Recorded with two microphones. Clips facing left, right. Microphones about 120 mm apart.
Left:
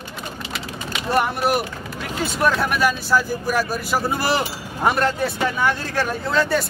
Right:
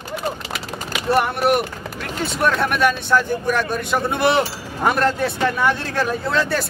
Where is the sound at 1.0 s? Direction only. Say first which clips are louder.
Right 2 dB; centre (ahead or behind).